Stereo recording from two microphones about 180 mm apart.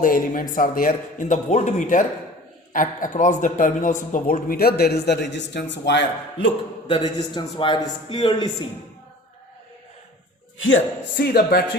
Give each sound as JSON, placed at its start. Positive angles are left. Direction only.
{"t": 0.0, "sound": "a man's voice", "side_deg": 50}
{"t": 6.8, "sound": "a man's voice", "side_deg": 25}
{"t": 10.6, "sound": "speech", "side_deg": 90}
{"t": 11.3, "sound": "a man's voice", "side_deg": 60}